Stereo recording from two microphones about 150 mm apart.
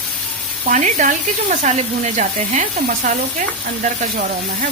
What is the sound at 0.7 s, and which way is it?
Speech, 55° right (ahead or behind).